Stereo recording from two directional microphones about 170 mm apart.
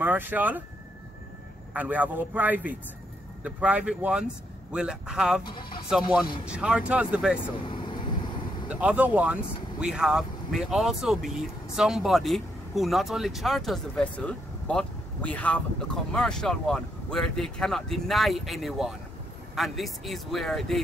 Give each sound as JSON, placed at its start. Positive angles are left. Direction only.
{"t": 0.0, "sound": "a man's voice", "side_deg": -10}
{"t": 1.7, "sound": "a man's voice", "side_deg": -10}
{"t": 6.4, "sound": "speech", "side_deg": -5}
{"t": 7.6, "sound": "whispering", "side_deg": 30}
{"t": 8.6, "sound": "speech", "side_deg": -5}